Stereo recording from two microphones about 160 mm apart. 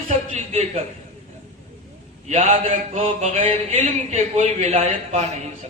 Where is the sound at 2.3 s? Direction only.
45° right (ahead or behind).